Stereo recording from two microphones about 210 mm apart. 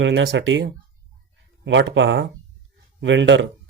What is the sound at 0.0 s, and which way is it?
Speech, 60° right (ahead or behind).